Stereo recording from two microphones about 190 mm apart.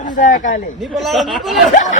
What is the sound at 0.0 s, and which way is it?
Speech, 45° left (ahead or behind).